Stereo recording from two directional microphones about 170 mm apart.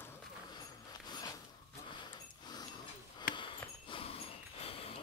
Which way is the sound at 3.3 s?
30° left (ahead or behind).